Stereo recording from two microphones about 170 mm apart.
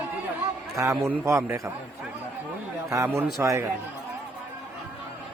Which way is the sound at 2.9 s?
15° right (ahead or behind).